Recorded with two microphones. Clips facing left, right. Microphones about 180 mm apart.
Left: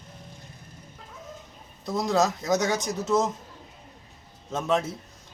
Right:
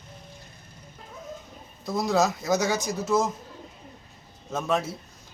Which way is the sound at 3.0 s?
20° left (ahead or behind).